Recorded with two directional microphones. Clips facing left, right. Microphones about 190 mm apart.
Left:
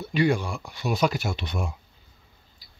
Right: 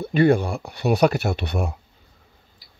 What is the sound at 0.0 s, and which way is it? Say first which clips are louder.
Speech: right 6 dB; 55° right (ahead or behind).